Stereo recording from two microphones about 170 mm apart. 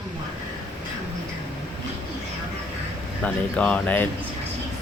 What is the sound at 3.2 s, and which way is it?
Speech, 5° left (ahead or behind).